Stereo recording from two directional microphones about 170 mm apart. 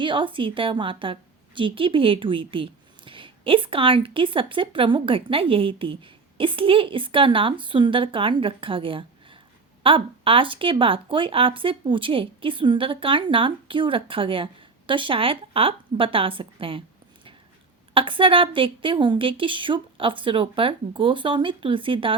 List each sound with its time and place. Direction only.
0.0 s a woman's voice: 30° right (ahead or behind)
17.9 s a woman's voice: 30° right (ahead or behind)